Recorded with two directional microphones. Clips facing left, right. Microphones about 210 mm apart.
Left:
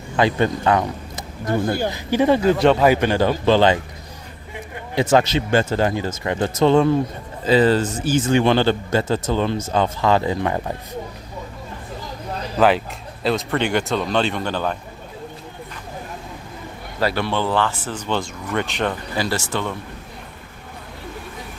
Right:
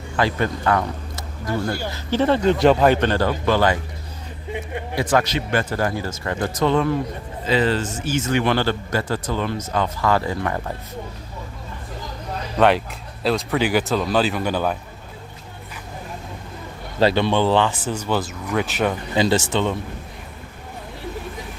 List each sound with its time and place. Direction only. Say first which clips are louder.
0.2 s speech: left 3 dB; 20° left (ahead or behind)
4.9 s speech: left 4 dB; 25° left (ahead or behind)
12.5 s a man's voice: even; centre (ahead or behind)
17.0 s speech: right 4 dB; 25° right (ahead or behind); by 18.9 s 5° right (ahead or behind)
19.1 s speech: right 4 dB; 20° right (ahead or behind)